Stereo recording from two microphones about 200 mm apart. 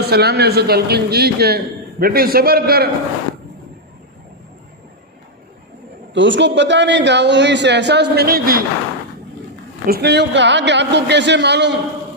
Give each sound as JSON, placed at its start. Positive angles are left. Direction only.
{"t": 0.0, "sound": "a man's voice", "side_deg": -55}
{"t": 6.1, "sound": "a man's voice", "side_deg": -65}
{"t": 9.8, "sound": "a man's voice", "side_deg": -50}